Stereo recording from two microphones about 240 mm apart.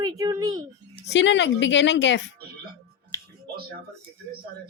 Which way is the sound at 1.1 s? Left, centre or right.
Left.